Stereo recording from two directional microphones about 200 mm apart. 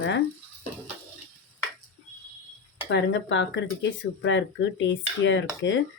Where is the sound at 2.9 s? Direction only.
65° left (ahead or behind).